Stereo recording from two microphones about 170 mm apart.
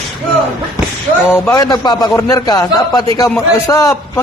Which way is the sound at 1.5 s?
20° left (ahead or behind).